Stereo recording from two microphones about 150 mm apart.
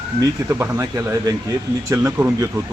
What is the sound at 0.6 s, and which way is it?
Speech, 20° right (ahead or behind).